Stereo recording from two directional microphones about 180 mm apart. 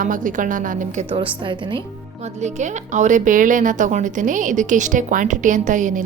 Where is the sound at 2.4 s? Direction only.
40° right (ahead or behind).